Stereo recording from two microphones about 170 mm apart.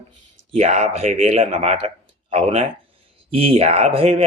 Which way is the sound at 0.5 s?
40° right (ahead or behind).